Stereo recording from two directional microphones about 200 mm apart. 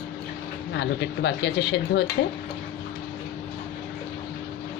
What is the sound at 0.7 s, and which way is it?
A woman's voice, 65° left (ahead or behind).